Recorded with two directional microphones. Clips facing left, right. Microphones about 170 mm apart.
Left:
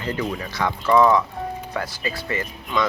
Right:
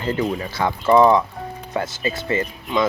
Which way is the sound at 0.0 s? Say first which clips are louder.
Right 4 dB; 30° right (ahead or behind).